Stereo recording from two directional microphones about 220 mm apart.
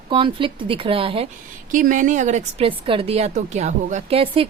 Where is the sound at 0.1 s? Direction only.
25° right (ahead or behind).